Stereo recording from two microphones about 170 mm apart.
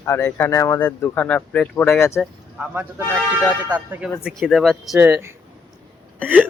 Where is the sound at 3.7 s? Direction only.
10° right (ahead or behind).